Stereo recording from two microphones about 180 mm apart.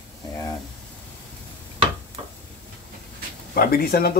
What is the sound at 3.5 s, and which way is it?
Speech, 55° left (ahead or behind).